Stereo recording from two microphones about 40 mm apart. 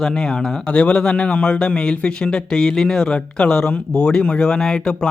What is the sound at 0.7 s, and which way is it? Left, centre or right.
A man's voice, left.